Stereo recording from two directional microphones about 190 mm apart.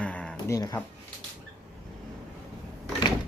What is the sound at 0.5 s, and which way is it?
Speech, 20° left (ahead or behind).